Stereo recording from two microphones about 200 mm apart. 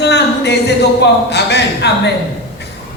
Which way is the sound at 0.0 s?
55° left (ahead or behind).